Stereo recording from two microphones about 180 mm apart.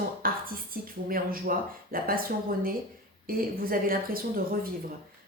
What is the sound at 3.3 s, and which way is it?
Speech, 55° right (ahead or behind).